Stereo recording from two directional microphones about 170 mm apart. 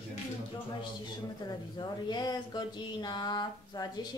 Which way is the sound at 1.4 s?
25° left (ahead or behind).